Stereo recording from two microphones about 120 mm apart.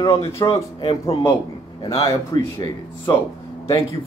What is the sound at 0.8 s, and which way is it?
Speech, 50° left (ahead or behind).